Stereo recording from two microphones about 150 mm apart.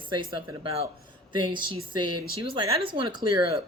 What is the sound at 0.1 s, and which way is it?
Speech, 30° right (ahead or behind).